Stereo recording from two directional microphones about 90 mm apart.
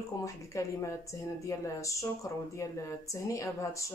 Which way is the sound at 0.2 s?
35° left (ahead or behind).